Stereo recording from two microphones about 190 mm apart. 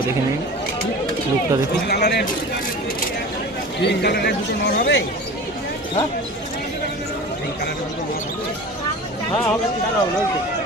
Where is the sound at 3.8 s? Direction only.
60° left (ahead or behind).